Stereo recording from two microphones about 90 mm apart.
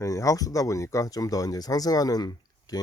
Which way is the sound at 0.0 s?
35° left (ahead or behind).